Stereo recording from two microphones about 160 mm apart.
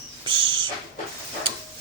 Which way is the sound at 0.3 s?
30° right (ahead or behind).